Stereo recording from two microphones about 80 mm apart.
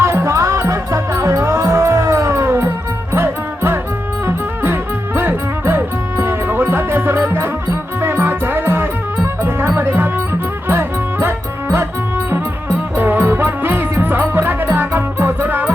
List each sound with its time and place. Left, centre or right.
0.0 s music: right
13.0 s music: right